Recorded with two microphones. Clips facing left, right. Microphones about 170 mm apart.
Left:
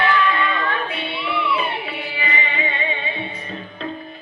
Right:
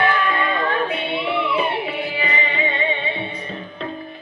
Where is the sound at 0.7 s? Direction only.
50° right (ahead or behind).